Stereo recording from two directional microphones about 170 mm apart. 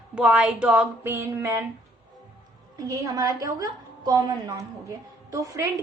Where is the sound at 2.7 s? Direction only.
20° right (ahead or behind).